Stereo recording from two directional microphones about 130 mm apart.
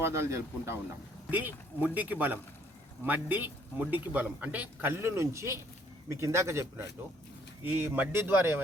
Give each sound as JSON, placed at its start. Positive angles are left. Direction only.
{"t": 0.0, "sound": "speech", "side_deg": -20}